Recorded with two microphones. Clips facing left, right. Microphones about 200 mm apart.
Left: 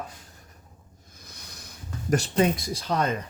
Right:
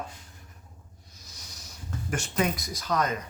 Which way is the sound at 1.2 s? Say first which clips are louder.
Left 3 dB; 60° left (ahead or behind).